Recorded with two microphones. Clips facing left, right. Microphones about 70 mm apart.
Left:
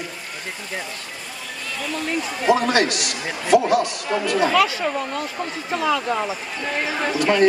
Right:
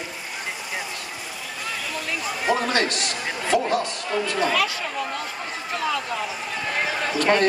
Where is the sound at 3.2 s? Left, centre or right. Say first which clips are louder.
Left 6 dB; centre.